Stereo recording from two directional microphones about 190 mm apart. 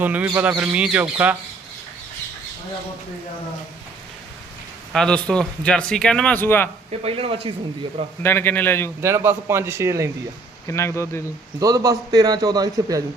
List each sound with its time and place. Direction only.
0.0 s speech: 10° right (ahead or behind)
4.9 s speech: 5° left (ahead or behind)
7.0 s speech: 30° right (ahead or behind)
8.2 s a man's voice: 10° left (ahead or behind)
9.0 s speech: 15° right (ahead or behind)
10.7 s a man's voice: 15° left (ahead or behind)
11.6 s a man's voice: 20° right (ahead or behind)